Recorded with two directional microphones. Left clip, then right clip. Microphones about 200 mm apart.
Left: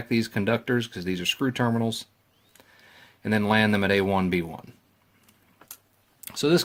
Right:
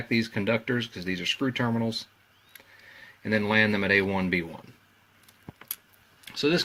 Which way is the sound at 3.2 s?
50° left (ahead or behind).